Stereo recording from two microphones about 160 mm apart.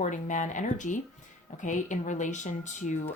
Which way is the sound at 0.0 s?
50° left (ahead or behind).